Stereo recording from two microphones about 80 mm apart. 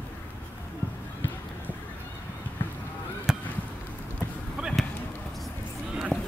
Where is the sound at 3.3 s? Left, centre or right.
Centre.